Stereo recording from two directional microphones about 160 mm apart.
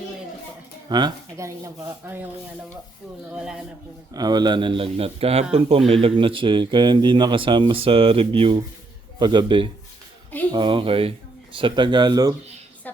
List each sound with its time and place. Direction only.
0.9 s speech: 25° right (ahead or behind)
3.3 s speech: 5° right (ahead or behind)
4.1 s speech: 25° right (ahead or behind)